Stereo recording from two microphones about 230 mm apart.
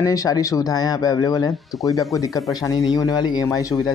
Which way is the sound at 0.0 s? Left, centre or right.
Centre.